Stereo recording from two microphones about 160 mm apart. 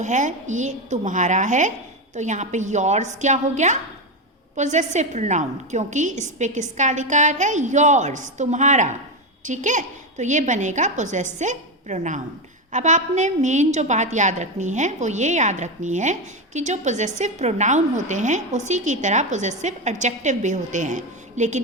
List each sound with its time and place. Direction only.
0.0 s a woman's voice: 50° right (ahead or behind)